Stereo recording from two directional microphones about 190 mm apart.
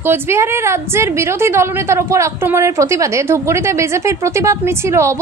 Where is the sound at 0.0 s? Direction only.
10° right (ahead or behind).